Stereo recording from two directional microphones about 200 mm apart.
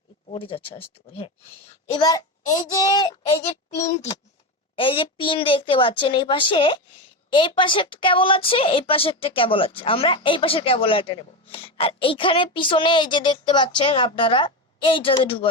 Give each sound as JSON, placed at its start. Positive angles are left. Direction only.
{"t": 0.3, "sound": "a woman's voice", "side_deg": 25}
{"t": 1.9, "sound": "a woman's voice", "side_deg": 20}
{"t": 4.8, "sound": "a woman's voice", "side_deg": 25}